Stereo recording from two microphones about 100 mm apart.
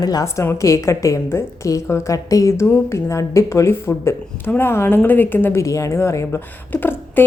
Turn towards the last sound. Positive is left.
turn(degrees=20)  # may be behind; listen again after turning